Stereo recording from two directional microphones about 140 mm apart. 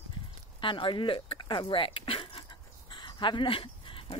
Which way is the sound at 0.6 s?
35° left (ahead or behind).